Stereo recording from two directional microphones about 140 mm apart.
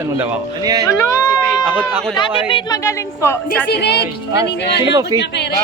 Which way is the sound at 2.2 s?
35° left (ahead or behind).